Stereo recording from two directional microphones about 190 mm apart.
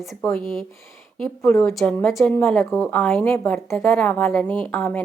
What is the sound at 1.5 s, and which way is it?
A woman's voice, 5° left (ahead or behind).